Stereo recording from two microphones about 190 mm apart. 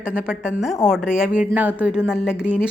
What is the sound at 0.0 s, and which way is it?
A woman's voice, 5° right (ahead or behind).